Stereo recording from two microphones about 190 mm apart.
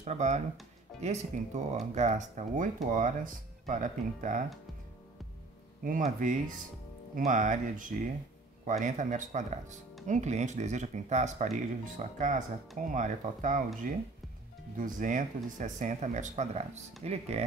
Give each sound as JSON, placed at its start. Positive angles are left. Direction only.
{"t": 0.0, "sound": "speech", "side_deg": -40}
{"t": 5.9, "sound": "speech", "side_deg": -45}